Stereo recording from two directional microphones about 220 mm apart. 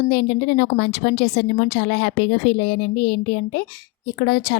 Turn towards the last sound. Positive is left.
turn(degrees=45)  # may be behind; listen again after turning